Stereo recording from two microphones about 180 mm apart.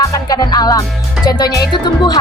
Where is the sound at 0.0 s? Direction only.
20° left (ahead or behind).